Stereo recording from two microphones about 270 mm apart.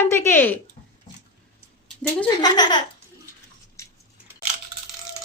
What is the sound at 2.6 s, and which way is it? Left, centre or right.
Speech, centre.